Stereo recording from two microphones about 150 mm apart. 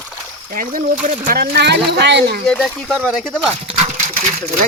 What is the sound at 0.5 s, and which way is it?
Speech, 60° right (ahead or behind).